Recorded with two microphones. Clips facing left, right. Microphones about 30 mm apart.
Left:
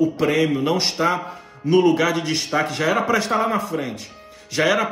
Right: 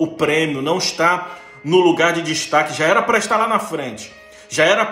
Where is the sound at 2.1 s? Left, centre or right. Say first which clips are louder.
Right 4 dB; right.